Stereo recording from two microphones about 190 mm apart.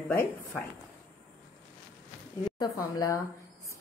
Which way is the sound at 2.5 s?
20° left (ahead or behind).